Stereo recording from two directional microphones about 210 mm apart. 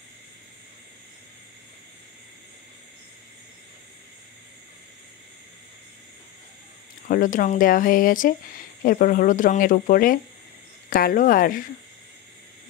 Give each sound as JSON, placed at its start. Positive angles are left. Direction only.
{"t": 7.1, "sound": "speech", "side_deg": 40}